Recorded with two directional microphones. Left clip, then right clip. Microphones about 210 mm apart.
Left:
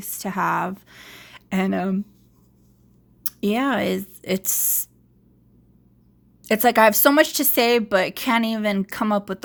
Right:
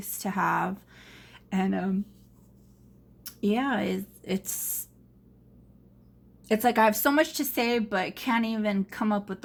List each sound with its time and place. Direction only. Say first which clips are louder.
0.0 s speech: left 4 dB; 50° left (ahead or behind)
3.2 s speech: left 5 dB; 50° left (ahead or behind)
6.4 s speech: left 7 dB; 50° left (ahead or behind)